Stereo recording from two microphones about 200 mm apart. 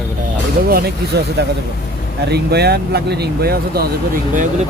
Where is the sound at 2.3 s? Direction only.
55° right (ahead or behind).